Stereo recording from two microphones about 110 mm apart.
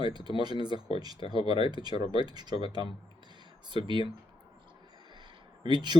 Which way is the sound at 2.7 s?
40° right (ahead or behind).